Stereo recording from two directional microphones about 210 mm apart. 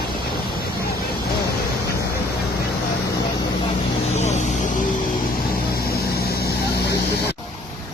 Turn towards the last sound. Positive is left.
turn(degrees=50)  # may be behind; listen again after turning